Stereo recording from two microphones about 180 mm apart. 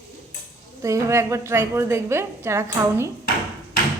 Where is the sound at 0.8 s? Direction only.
15° right (ahead or behind).